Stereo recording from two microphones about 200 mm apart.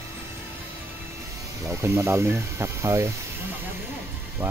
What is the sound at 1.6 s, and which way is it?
Speech, 15° right (ahead or behind).